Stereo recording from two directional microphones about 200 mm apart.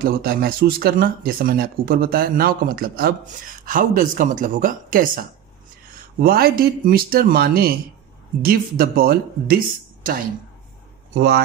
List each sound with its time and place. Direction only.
0.0 s speech: 50° right (ahead or behind)
6.2 s speech: 50° right (ahead or behind)
11.1 s speech: 55° right (ahead or behind)